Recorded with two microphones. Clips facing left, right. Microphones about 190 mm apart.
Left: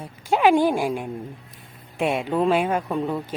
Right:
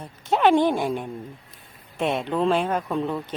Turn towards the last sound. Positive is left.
turn(degrees=5)  # may be behind; listen again after turning